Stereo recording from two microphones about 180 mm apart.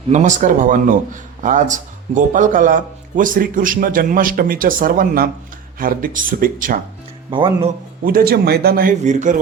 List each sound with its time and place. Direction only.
0.1 s speech: 40° right (ahead or behind)
7.3 s speech: 30° right (ahead or behind)
8.0 s speech: 55° right (ahead or behind)